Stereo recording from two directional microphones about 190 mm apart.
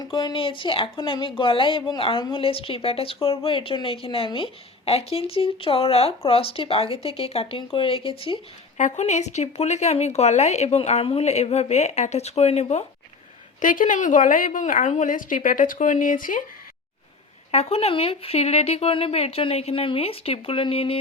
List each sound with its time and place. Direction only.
0.0 s a woman's voice: 20° left (ahead or behind); by 16.4 s 45° left (ahead or behind)
17.5 s speech: 35° left (ahead or behind)